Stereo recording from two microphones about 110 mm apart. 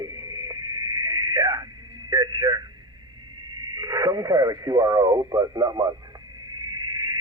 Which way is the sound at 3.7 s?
35° right (ahead or behind).